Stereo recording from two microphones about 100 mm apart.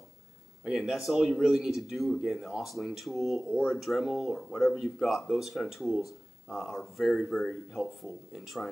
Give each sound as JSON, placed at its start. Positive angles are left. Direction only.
{"t": 0.7, "sound": "speech", "side_deg": -5}